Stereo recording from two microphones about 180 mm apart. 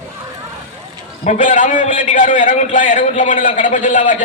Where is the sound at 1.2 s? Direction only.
45° left (ahead or behind).